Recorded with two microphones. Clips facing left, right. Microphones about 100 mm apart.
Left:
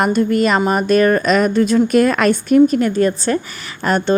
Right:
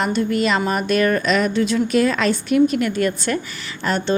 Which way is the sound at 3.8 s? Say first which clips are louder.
Left 5 dB; 45° left (ahead or behind).